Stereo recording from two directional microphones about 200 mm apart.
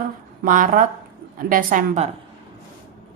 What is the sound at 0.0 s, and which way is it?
A woman's voice, 40° right (ahead or behind).